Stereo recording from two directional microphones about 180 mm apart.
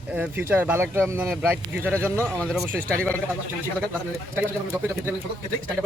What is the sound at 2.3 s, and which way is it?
Speech, 5° left (ahead or behind).